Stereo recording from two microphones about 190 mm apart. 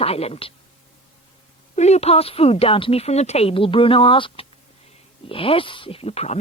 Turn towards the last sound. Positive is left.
turn(degrees=35)  # may be behind; listen again after turning